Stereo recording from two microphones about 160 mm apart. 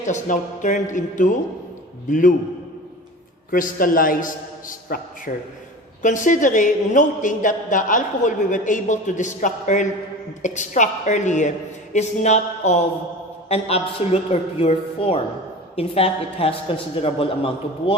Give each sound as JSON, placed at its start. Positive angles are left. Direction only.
{"t": 0.0, "sound": "a man's voice", "side_deg": 50}
{"t": 3.5, "sound": "a man's voice", "side_deg": 60}